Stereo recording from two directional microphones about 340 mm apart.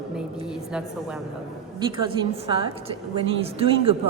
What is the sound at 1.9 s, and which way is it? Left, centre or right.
A woman's voice, centre.